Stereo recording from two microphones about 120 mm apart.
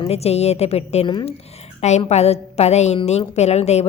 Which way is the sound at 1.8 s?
70° left (ahead or behind).